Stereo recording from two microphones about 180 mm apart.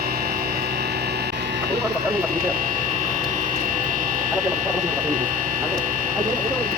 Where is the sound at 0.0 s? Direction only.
55° right (ahead or behind).